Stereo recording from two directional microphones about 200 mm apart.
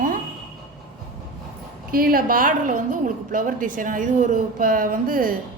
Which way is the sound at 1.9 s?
45° right (ahead or behind).